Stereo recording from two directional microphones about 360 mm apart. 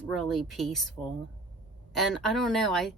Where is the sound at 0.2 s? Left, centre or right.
Centre.